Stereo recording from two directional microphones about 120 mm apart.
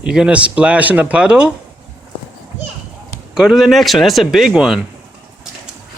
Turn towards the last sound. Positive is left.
turn(degrees=-5)  # may be behind; listen again after turning